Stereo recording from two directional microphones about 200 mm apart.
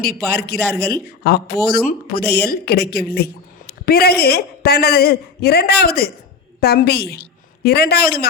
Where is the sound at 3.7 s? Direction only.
50° left (ahead or behind).